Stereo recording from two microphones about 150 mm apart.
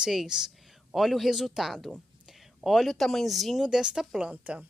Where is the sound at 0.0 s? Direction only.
5° right (ahead or behind).